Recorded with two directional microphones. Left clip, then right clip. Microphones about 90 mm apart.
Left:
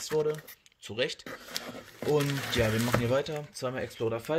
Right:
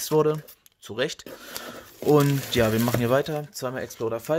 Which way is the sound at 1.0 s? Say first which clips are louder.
Right 4 dB; 55° right (ahead or behind).